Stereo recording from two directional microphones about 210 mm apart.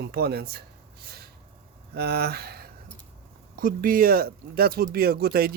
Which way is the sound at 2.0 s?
50° right (ahead or behind).